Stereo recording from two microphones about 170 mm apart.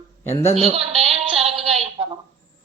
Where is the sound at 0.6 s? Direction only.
35° right (ahead or behind).